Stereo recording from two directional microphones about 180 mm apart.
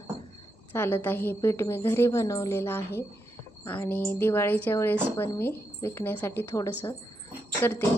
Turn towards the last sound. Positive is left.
turn(degrees=10)  # may be behind; listen again after turning